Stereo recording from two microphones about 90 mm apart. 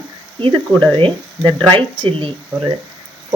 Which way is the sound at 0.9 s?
70° right (ahead or behind).